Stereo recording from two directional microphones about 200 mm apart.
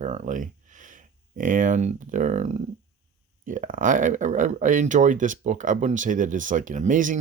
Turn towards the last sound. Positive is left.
turn(degrees=-40)  # may be behind; listen again after turning